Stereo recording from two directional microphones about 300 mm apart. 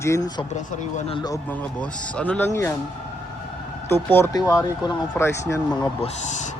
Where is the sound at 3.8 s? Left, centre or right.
Centre.